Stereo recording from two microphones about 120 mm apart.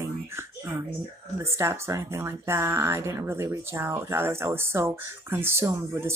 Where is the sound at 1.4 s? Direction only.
20° right (ahead or behind).